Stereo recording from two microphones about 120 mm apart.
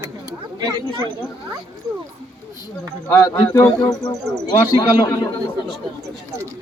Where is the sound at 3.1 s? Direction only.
20° left (ahead or behind).